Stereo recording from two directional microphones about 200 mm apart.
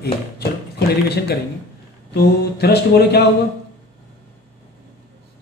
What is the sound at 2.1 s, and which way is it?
Music, 55° left (ahead or behind).